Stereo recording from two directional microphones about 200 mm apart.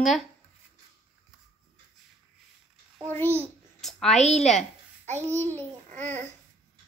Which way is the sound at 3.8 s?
Centre (ahead or behind).